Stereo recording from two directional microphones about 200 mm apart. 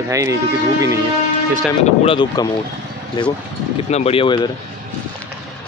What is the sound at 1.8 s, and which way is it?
Speech, 25° left (ahead or behind).